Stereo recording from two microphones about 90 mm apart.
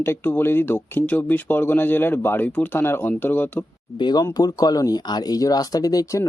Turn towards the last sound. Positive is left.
turn(degrees=40)  # may be behind; listen again after turning